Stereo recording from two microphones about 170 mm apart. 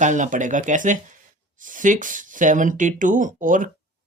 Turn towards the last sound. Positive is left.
turn(degrees=-50)  # may be behind; listen again after turning